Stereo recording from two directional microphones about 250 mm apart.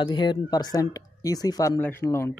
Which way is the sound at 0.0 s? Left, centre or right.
Centre.